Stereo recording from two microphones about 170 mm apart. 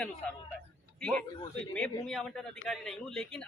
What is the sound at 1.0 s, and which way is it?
A man's voice, 5° left (ahead or behind).